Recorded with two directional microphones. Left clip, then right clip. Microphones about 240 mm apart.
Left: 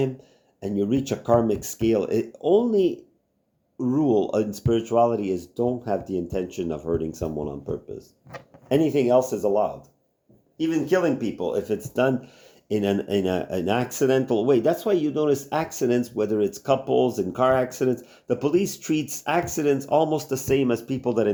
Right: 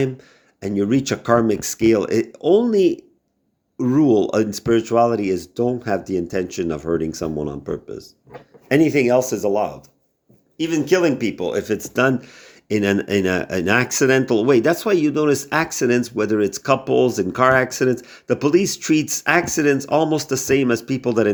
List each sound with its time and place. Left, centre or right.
0.6 s speech: centre